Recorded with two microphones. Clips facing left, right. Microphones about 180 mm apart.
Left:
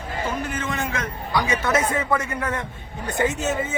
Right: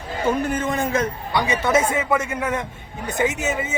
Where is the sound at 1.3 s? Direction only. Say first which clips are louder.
Right 1 dB; 25° right (ahead or behind).